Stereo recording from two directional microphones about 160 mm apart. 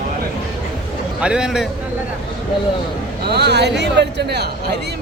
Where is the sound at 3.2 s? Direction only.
90° right.